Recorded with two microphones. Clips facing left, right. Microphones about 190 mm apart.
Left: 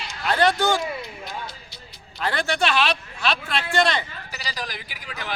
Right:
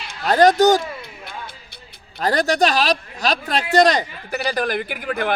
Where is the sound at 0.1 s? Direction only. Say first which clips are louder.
Right 7 dB; 40° right (ahead or behind).